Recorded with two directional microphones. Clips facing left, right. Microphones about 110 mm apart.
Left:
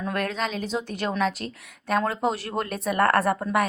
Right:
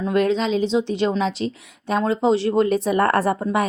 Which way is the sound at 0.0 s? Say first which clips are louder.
Right 8 dB; 20° right (ahead or behind).